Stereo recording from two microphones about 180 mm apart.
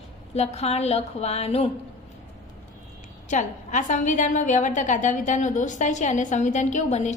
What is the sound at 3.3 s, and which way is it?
A woman's voice, 45° left (ahead or behind).